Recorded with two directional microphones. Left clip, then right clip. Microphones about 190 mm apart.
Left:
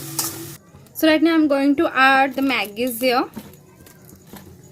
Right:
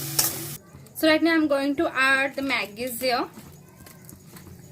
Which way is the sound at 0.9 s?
45° left (ahead or behind).